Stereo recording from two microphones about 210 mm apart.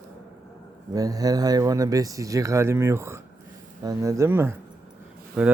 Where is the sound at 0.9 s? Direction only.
15° right (ahead or behind).